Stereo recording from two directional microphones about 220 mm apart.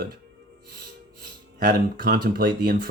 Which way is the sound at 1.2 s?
40° right (ahead or behind).